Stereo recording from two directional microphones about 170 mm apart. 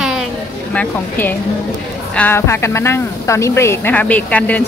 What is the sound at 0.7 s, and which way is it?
Speech, 10° left (ahead or behind).